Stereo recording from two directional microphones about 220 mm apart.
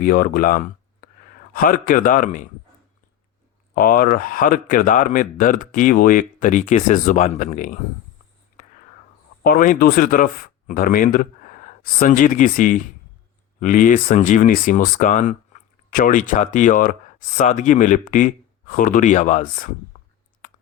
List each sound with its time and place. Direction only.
0.0 s speech: 40° left (ahead or behind)
3.8 s speech: 40° left (ahead or behind)
9.4 s speech: 40° left (ahead or behind)